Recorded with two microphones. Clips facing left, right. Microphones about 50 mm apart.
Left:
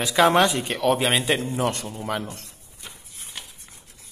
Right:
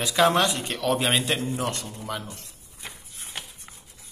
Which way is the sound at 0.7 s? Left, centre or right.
Centre.